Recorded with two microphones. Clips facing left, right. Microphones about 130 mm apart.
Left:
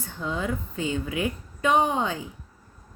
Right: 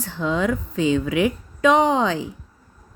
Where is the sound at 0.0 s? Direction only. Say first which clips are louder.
Right 7 dB; 90° right.